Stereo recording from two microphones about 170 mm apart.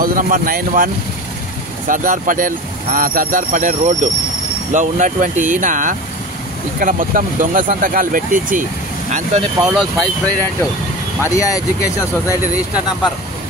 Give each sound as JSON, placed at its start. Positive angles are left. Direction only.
{"t": 0.0, "sound": "speech", "side_deg": -55}
{"t": 1.9, "sound": "speech", "side_deg": -50}
{"t": 9.1, "sound": "speech", "side_deg": -40}
{"t": 9.7, "sound": "speech", "side_deg": 5}
{"t": 11.1, "sound": "speech", "side_deg": 20}